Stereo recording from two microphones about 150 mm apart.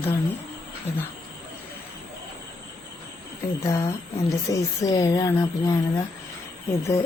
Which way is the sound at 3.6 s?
20° left (ahead or behind).